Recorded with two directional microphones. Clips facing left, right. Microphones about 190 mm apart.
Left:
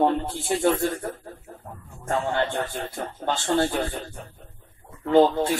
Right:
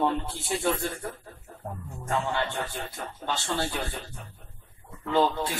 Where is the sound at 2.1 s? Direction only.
50° left (ahead or behind).